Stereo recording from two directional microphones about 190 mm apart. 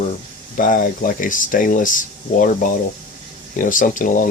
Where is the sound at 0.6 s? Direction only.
45° left (ahead or behind).